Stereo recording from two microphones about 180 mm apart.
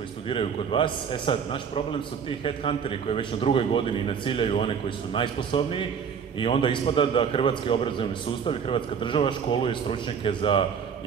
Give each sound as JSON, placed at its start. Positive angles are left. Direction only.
{"t": 0.3, "sound": "a man's voice", "side_deg": 30}